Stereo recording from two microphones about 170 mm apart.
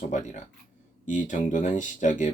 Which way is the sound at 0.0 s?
45° left (ahead or behind).